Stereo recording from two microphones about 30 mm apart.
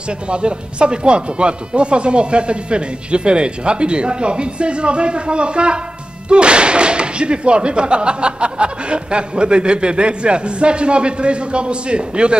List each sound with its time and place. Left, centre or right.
0.3 s speech: right